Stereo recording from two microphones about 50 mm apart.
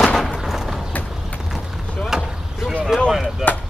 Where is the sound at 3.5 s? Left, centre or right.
Left.